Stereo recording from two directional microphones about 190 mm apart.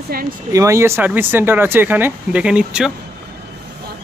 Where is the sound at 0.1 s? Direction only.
50° right (ahead or behind).